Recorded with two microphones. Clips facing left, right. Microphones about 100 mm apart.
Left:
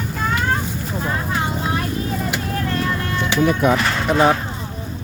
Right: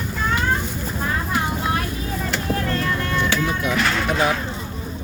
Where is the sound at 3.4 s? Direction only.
45° left (ahead or behind).